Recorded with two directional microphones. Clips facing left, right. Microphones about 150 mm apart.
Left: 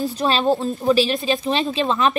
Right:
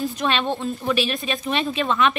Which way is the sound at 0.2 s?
35° left (ahead or behind).